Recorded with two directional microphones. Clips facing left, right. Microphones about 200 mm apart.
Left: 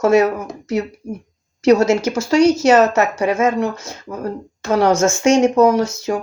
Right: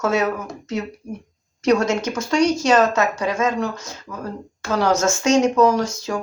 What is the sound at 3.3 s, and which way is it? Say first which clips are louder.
Speech: left 4 dB; 25° left (ahead or behind).